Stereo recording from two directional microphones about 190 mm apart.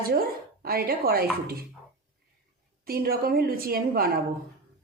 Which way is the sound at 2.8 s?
55° right (ahead or behind).